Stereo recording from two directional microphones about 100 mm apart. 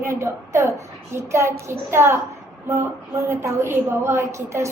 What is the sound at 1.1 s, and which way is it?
A woman's voice, 30° right (ahead or behind).